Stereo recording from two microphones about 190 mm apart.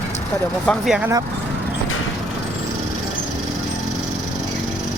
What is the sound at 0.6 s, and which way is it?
Speech, 5° left (ahead or behind).